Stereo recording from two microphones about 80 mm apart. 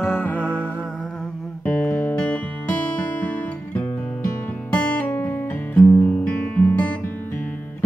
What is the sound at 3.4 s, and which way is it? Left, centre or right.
Music, left.